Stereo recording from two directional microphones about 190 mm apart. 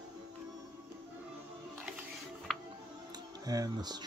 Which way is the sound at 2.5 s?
5° left (ahead or behind).